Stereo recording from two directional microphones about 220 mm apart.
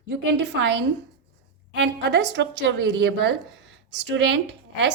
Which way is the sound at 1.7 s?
55° right (ahead or behind).